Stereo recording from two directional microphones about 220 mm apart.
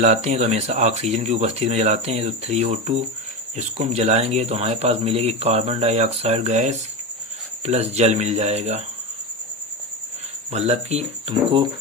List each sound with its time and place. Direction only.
0.0 s speech: 30° right (ahead or behind)
10.5 s speech: 30° right (ahead or behind)